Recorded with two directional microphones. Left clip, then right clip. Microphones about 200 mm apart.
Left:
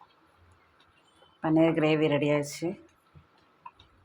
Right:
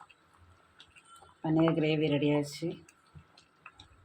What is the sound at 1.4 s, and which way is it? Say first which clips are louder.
Speech: left 4 dB; 10° left (ahead or behind).